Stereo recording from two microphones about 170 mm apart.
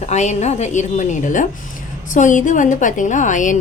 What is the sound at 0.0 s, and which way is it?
A woman's voice, 45° left (ahead or behind).